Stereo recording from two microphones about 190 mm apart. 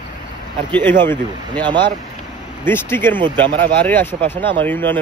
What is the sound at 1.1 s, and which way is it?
Speech, 25° right (ahead or behind).